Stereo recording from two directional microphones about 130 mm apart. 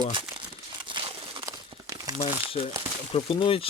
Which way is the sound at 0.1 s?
40° right (ahead or behind).